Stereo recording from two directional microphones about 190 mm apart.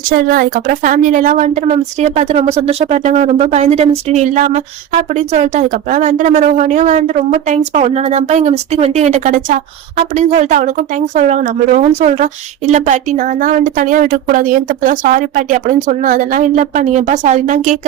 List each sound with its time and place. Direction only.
0.1 s a woman's voice: 50° right (ahead or behind)